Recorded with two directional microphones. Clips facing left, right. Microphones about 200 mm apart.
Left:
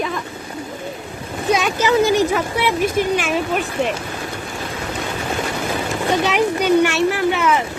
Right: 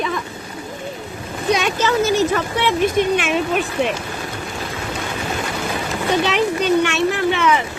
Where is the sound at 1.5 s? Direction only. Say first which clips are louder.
Even; centre (ahead or behind).